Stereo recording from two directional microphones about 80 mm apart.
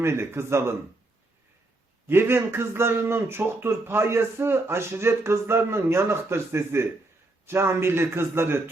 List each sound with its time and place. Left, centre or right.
0.0 s speech: right
2.0 s speech: right